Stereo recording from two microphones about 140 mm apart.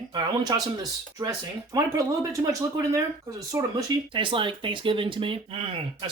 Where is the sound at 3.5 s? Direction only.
20° right (ahead or behind).